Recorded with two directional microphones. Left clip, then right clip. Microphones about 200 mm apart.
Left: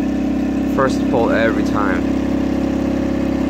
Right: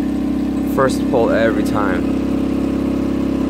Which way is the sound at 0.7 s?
15° right (ahead or behind).